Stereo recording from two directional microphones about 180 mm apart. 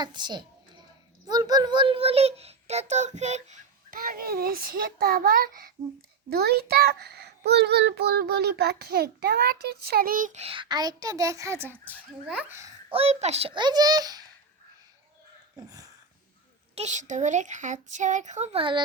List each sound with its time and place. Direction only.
0.0 s a child's voice: 25° right (ahead or behind); by 3.4 s 40° right (ahead or behind)
3.9 s a child's voice: 50° right (ahead or behind); by 12.7 s 15° right (ahead or behind)
12.9 s a child's voice: 35° right (ahead or behind)
15.5 s a sound: 20° right (ahead or behind)
16.7 s a child's voice: 40° right (ahead or behind)